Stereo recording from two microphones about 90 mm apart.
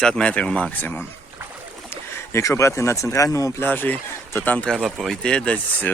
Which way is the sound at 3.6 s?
20° left (ahead or behind).